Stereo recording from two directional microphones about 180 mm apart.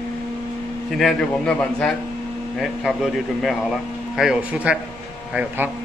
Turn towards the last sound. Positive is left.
turn(degrees=-5)  # may be behind; listen again after turning